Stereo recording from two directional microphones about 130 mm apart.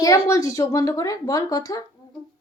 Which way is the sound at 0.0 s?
25° left (ahead or behind).